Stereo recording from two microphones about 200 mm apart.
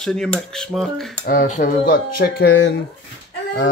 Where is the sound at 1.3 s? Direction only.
40° left (ahead or behind); by 2.7 s 60° left (ahead or behind).